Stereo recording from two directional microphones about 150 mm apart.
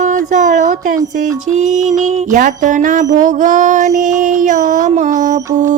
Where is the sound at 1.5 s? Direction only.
55° right (ahead or behind).